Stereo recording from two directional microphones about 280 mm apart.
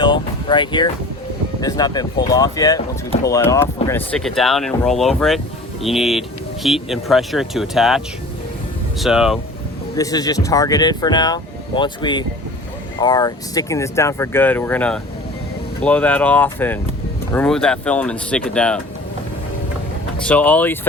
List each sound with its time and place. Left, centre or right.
0.0 s vehicle: centre
1.6 s speech: centre
9.9 s speech: centre
20.2 s speech: centre